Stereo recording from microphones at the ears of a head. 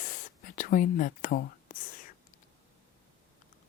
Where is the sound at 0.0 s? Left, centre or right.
Left.